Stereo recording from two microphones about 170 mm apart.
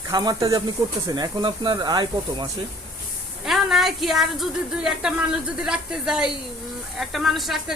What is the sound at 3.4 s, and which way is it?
A woman's voice, centre (ahead or behind).